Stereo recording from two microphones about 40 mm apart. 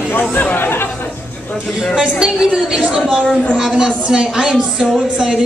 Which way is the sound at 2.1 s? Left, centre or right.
Centre.